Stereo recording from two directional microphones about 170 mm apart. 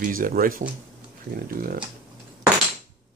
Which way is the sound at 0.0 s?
55° right (ahead or behind).